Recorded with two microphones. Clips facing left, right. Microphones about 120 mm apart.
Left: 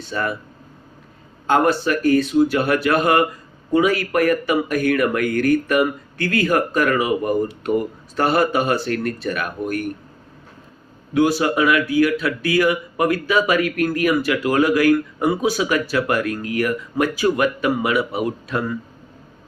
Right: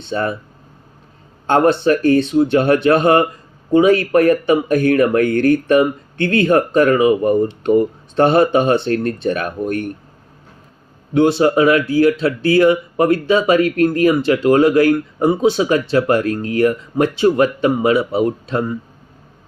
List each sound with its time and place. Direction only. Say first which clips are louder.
0.0 s speech: right 4 dB; 30° right (ahead or behind)
1.5 s speech: right 4 dB; 30° right (ahead or behind)
11.1 s speech: right 4 dB; 30° right (ahead or behind)